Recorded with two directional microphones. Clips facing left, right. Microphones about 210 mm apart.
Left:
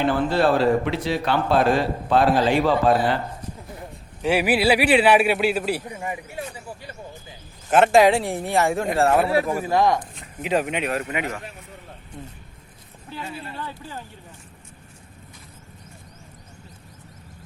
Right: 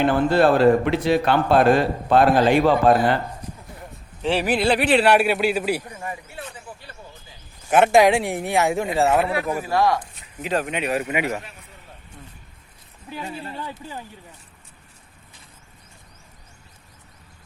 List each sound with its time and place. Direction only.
0.0 s a man's voice: 55° right (ahead or behind)
4.2 s speech: 10° left (ahead or behind)
5.9 s speech: 15° left (ahead or behind)
7.7 s speech: centre (ahead or behind)
9.6 s speech: 20° left (ahead or behind)
10.4 s speech: centre (ahead or behind)
13.1 s speech: 15° right (ahead or behind)